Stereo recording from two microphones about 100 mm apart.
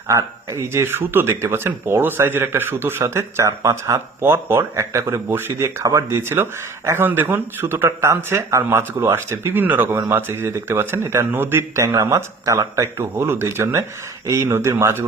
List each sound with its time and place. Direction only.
0.1 s speech: 30° right (ahead or behind)